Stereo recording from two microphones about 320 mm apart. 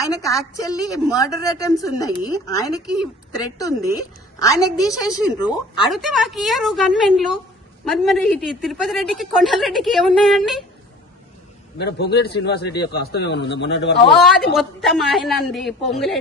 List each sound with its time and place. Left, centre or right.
0.0 s a woman's voice: centre
5.9 s a woman's voice: centre
11.8 s a man's voice: left
14.5 s a woman's voice: centre